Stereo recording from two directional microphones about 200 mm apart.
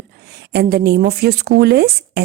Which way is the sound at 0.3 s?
50° right (ahead or behind).